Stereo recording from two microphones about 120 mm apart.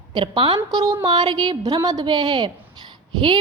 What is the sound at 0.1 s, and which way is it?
Speech, 45° right (ahead or behind).